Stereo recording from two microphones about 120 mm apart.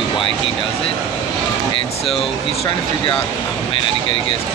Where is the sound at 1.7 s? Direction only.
50° left (ahead or behind).